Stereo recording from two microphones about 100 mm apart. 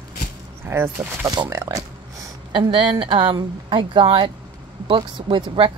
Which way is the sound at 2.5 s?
55° right (ahead or behind).